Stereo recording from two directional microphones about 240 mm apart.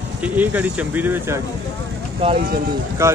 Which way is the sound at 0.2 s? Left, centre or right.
Centre.